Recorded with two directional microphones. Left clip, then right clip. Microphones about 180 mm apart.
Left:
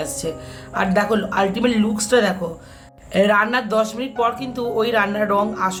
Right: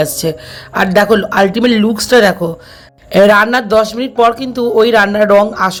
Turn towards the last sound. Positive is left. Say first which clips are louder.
# right 10 dB
turn(degrees=-40)  # may be behind; listen again after turning